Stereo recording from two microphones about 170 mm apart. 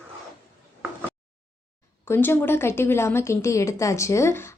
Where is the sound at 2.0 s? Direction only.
15° left (ahead or behind).